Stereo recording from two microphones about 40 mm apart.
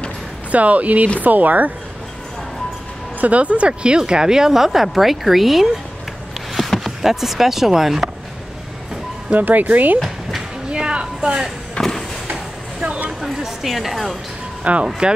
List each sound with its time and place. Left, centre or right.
0.5 s speech: right
3.2 s speech: right; by 5.7 s centre
6.5 s a sound: centre
7.0 s speech: centre
9.3 s speech: right
10.7 s a sound: right
11.8 s vehicle: left
13.2 s speech: centre
14.6 s speech: right